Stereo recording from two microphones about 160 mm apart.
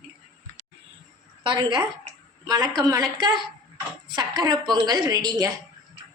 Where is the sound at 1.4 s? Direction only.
30° right (ahead or behind).